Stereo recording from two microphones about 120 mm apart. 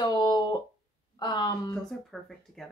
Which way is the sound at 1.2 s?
40° left (ahead or behind).